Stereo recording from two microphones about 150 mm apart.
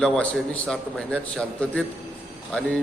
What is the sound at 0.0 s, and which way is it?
A man's voice, 5° left (ahead or behind).